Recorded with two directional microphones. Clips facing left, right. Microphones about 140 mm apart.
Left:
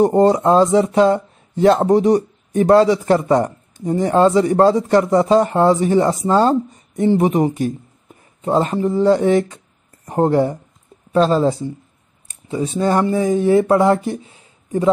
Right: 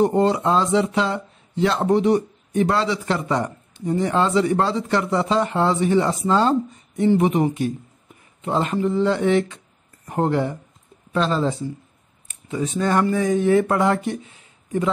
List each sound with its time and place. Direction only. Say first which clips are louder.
0.0 s speech: left 5 dB; 40° left (ahead or behind)